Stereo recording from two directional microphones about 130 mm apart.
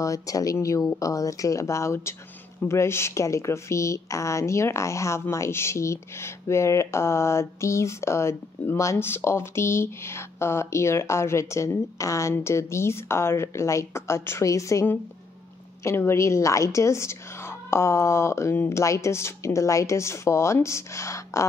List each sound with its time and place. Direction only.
0.0 s a woman's voice: 25° left (ahead or behind)